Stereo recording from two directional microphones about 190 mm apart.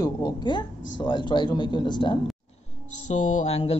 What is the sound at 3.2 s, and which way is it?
Speech, 35° left (ahead or behind).